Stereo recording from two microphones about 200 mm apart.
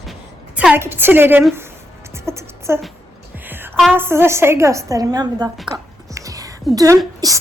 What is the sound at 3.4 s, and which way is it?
Music, 10° right (ahead or behind).